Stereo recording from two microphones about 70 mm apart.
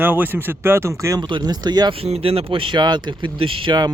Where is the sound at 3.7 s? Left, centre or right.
Right.